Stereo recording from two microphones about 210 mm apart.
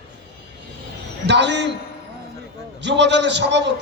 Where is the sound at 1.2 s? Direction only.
55° right (ahead or behind).